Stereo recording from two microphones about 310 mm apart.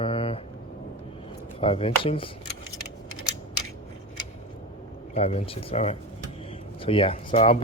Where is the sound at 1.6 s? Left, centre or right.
Centre.